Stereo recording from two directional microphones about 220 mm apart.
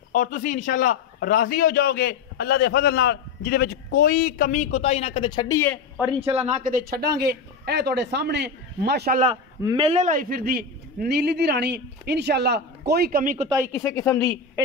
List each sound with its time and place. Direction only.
0.1 s a man's voice: 35° left (ahead or behind); by 5.8 s 10° left (ahead or behind)
6.3 s a man's voice: 30° right (ahead or behind); by 9.2 s 45° right (ahead or behind)
9.6 s a man's voice: 20° right (ahead or behind); by 13.5 s 40° right (ahead or behind)
13.7 s speech: 15° left (ahead or behind)